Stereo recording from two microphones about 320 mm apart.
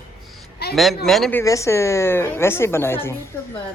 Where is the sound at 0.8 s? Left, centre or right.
Centre.